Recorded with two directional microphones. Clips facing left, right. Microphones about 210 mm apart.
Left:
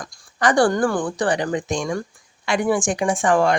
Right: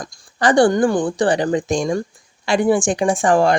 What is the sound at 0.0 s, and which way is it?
Speech, 25° right (ahead or behind).